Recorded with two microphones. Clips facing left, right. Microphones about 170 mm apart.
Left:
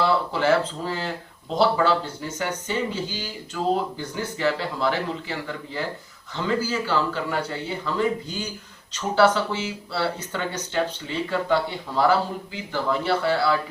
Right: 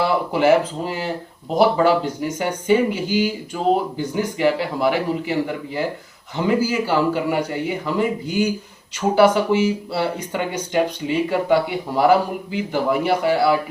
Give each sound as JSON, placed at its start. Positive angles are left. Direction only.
{"t": 0.1, "sound": "speech", "side_deg": -15}